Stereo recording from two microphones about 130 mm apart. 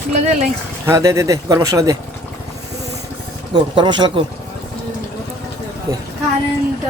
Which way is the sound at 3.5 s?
35° right (ahead or behind).